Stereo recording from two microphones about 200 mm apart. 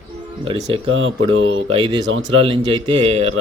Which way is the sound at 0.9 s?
75° right (ahead or behind).